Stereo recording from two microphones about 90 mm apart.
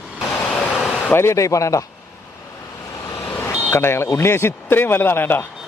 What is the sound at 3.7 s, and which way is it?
A man's voice, 25° left (ahead or behind).